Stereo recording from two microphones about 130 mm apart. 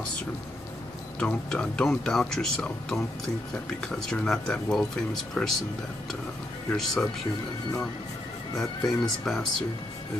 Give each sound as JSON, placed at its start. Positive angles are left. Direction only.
{"t": 1.2, "sound": "speech", "side_deg": 5}
{"t": 6.7, "sound": "speech", "side_deg": 5}
{"t": 8.5, "sound": "speech", "side_deg": 0}